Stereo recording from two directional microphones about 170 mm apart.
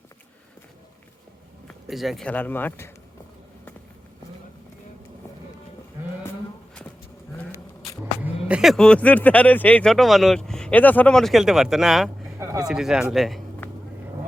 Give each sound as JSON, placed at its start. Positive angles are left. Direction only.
{"t": 1.6, "sound": "speech", "side_deg": 0}
{"t": 8.2, "sound": "speech", "side_deg": -5}
{"t": 12.4, "sound": "a sound", "side_deg": -20}
{"t": 12.6, "sound": "speech", "side_deg": -5}
{"t": 13.6, "sound": "vehicle", "side_deg": 10}